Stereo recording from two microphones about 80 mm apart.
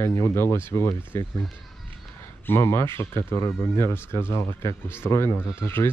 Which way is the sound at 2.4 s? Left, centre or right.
Left.